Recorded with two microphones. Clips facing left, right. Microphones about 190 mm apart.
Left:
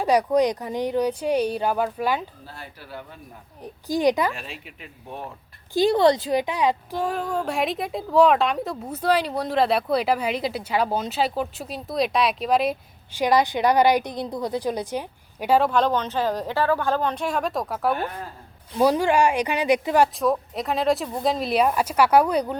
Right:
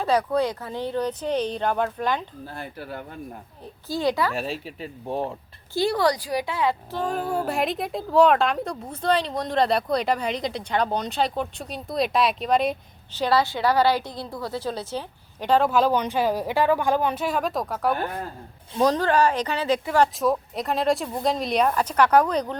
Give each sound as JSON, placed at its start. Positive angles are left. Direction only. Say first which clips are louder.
{"t": 0.0, "sound": "a woman's voice", "louder": "left 3 dB", "side_deg": 15}
{"t": 2.6, "sound": "speech", "louder": "right 4 dB", "side_deg": -50}
{"t": 3.6, "sound": "a woman's voice", "louder": "left 4 dB", "side_deg": 15}
{"t": 4.4, "sound": "speech", "louder": "right 9 dB", "side_deg": -35}
{"t": 5.7, "sound": "a woman's voice", "louder": "left 4 dB", "side_deg": 20}
{"t": 7.1, "sound": "speech", "louder": "right 3 dB", "side_deg": -5}
{"t": 13.1, "sound": "a woman's voice", "louder": "left 2 dB", "side_deg": 15}
{"t": 15.7, "sound": "a woman's voice", "louder": "right 1 dB", "side_deg": -10}
{"t": 20.1, "sound": "speech", "louder": "left 1 dB", "side_deg": 0}